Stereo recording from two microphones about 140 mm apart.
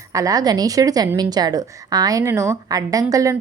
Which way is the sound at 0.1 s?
25° right (ahead or behind).